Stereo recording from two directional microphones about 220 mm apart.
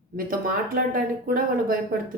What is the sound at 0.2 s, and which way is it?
Speech, 40° right (ahead or behind).